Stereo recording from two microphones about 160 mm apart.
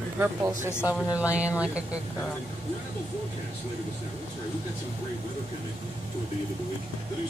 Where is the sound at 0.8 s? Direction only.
10° right (ahead or behind).